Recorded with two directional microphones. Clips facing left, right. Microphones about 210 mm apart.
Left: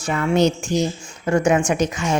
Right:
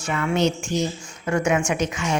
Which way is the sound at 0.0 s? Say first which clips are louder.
Left 4 dB; 35° left (ahead or behind).